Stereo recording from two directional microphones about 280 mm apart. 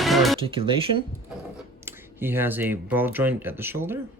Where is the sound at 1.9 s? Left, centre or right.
Centre.